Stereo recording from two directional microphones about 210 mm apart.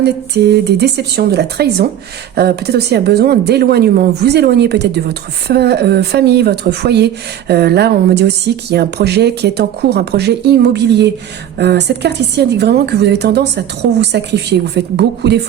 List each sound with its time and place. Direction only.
0.0 s a woman's voice: 50° right (ahead or behind)